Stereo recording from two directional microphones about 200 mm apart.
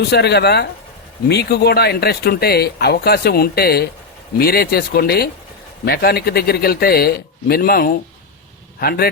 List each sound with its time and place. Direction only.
0.1 s speech: 55° left (ahead or behind)